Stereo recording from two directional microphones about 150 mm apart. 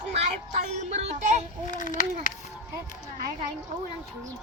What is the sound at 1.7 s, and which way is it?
Speech, 60° left (ahead or behind).